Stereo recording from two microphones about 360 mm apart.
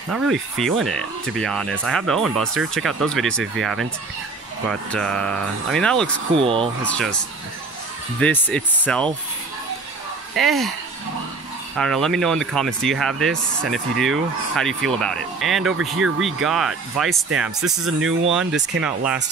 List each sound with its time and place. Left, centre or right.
0.1 s speech: centre
6.3 s speech: centre
6.8 s speech: centre
8.2 s speech: centre
10.3 s speech: centre
11.7 s speech: centre